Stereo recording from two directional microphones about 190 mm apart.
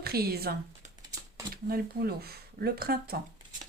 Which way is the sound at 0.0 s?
55° right (ahead or behind).